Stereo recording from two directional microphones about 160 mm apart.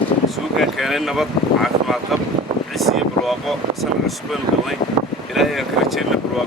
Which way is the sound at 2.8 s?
Centre (ahead or behind).